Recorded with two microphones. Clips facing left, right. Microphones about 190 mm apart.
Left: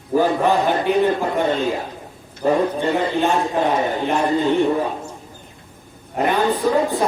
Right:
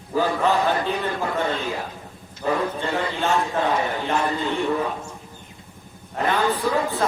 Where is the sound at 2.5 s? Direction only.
15° left (ahead or behind).